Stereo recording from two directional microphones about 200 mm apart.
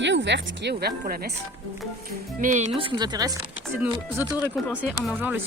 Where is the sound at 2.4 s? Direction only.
35° right (ahead or behind); by 3.3 s 20° right (ahead or behind).